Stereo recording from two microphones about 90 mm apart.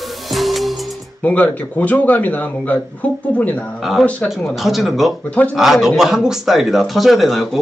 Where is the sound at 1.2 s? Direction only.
20° left (ahead or behind).